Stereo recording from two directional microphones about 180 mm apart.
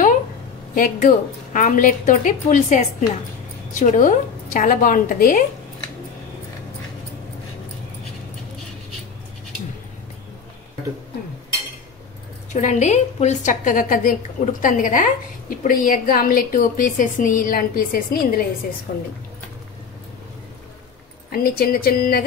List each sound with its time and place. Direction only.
0.7 s a woman's voice: 45° left (ahead or behind)
3.8 s a woman's voice: 45° left (ahead or behind)
12.5 s a woman's voice: 40° left (ahead or behind)
21.3 s speech: 60° left (ahead or behind)